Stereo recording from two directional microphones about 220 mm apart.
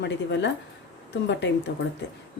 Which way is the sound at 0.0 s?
55° left (ahead or behind).